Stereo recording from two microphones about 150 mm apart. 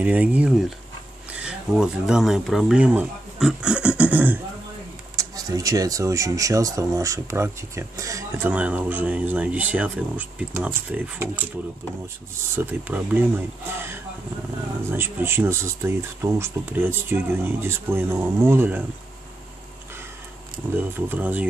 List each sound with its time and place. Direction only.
0.0 s speech: 10° right (ahead or behind)
5.1 s speech: 25° right (ahead or behind)
12.5 s speech: 10° right (ahead or behind)
14.9 s speech: 15° right (ahead or behind)
20.7 s speech: 10° right (ahead or behind)